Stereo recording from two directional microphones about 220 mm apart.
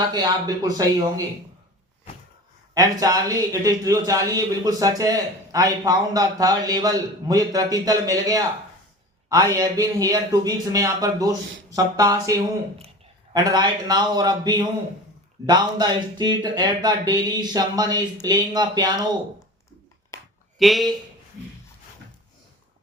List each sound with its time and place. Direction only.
0.0 s a man's voice: 20° right (ahead or behind)
2.7 s a man's voice: 15° right (ahead or behind)
20.1 s a sound: 15° left (ahead or behind)
20.6 s speech: centre (ahead or behind)